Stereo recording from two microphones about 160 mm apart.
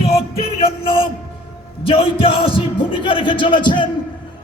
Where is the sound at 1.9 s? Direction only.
35° left (ahead or behind).